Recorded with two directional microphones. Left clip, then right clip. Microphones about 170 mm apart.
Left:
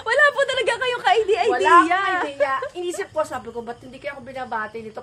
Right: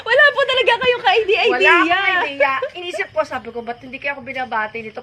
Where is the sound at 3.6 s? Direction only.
45° left (ahead or behind).